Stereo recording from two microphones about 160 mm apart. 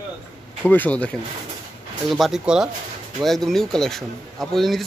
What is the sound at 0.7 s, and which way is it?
Speech, 10° left (ahead or behind).